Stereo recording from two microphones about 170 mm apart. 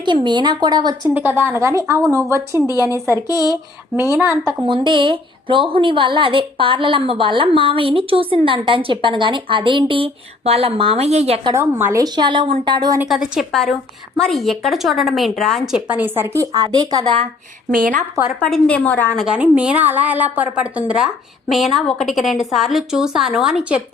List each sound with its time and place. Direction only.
0.0 s a woman's voice: 25° right (ahead or behind)
1.0 s a woman's voice: 10° right (ahead or behind)
2.6 s speech: 20° left (ahead or behind)
4.2 s a woman's voice: 15° right (ahead or behind)
4.6 s a woman's voice: 30° right (ahead or behind)
11.5 s a woman's voice: 15° right (ahead or behind)
13.0 s a woman's voice: 5° right (ahead or behind)
16.5 s a woman's voice: 25° right (ahead or behind)
17.7 s a woman's voice: 55° right (ahead or behind)
18.4 s a woman's voice: 5° left (ahead or behind)
19.2 s a woman's voice: 5° right (ahead or behind)